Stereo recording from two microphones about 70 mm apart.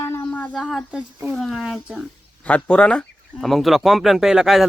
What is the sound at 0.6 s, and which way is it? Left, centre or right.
Speech, centre.